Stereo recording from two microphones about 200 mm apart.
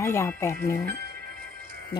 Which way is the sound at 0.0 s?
15° left (ahead or behind).